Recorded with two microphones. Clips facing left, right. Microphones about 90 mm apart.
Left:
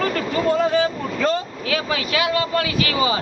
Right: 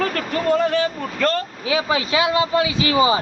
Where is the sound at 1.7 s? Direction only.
20° right (ahead or behind).